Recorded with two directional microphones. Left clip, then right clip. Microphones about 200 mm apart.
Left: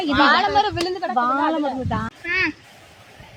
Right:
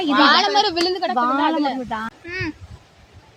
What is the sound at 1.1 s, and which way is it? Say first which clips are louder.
Speech: left 1 dB; 5° right (ahead or behind).